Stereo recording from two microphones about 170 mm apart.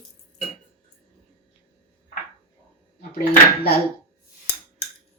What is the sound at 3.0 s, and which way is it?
Speech, 65° left (ahead or behind).